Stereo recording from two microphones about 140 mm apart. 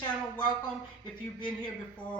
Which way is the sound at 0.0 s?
35° left (ahead or behind).